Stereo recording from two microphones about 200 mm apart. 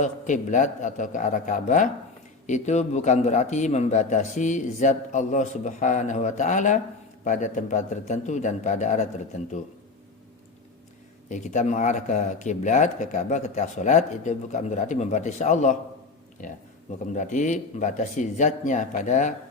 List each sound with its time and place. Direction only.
0.0 s speech: 40° left (ahead or behind)
11.3 s speech: 35° left (ahead or behind)
17.2 s speech: 40° left (ahead or behind)